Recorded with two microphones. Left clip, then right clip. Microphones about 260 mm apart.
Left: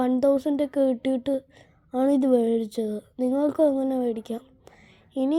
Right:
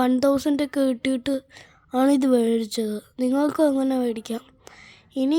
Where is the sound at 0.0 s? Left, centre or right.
Right.